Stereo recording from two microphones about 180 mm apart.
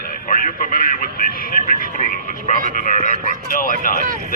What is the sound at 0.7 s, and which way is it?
Speech, 55° left (ahead or behind).